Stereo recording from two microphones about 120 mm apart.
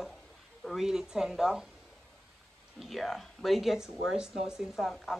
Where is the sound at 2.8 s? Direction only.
Centre (ahead or behind).